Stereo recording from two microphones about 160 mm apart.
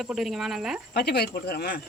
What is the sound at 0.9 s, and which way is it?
Speech, 90° left.